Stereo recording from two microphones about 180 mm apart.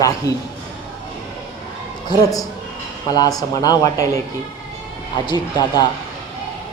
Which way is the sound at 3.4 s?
20° left (ahead or behind).